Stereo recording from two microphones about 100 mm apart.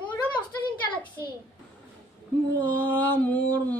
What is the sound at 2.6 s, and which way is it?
A woman's voice, 20° left (ahead or behind).